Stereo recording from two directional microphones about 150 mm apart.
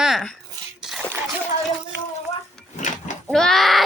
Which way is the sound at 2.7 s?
55° left (ahead or behind).